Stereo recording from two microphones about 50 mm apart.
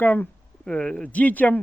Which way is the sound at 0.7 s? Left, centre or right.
Centre.